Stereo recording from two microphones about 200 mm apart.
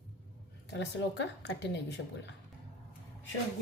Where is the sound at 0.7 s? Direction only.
60° left (ahead or behind).